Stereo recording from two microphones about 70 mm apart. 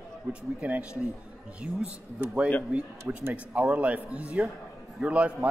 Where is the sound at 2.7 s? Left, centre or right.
Centre.